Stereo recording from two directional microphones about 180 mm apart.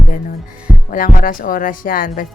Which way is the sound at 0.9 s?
45° left (ahead or behind).